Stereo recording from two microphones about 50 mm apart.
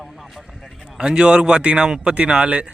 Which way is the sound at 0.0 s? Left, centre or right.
Centre.